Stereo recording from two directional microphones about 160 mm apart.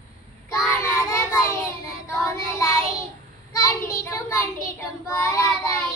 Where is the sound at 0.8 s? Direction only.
20° left (ahead or behind).